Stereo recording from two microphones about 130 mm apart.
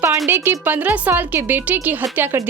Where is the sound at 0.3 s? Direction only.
15° right (ahead or behind).